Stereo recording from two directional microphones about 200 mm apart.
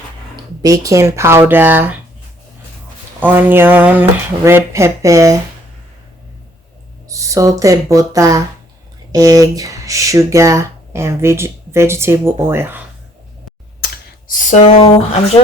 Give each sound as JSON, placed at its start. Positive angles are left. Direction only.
{"t": 0.6, "sound": "speech", "side_deg": -15}
{"t": 3.2, "sound": "speech", "side_deg": -10}
{"t": 7.1, "sound": "speech", "side_deg": -15}
{"t": 14.3, "sound": "speech", "side_deg": 35}